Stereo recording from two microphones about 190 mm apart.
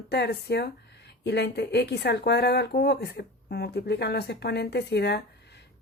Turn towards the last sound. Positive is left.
turn(degrees=60)  # may be behind; listen again after turning